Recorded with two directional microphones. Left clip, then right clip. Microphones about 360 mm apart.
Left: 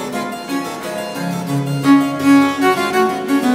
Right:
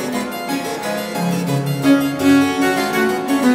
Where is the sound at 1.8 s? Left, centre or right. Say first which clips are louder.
Left 2 dB; centre.